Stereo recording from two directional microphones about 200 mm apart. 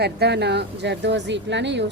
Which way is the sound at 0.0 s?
55° right (ahead or behind).